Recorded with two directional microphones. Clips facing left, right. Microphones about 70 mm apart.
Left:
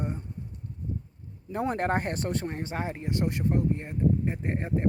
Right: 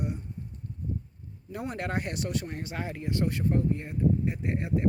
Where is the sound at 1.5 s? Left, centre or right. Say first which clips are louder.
Left 5 dB; left.